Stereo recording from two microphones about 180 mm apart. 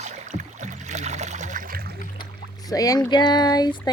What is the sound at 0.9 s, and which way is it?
Trickle, 40° right (ahead or behind).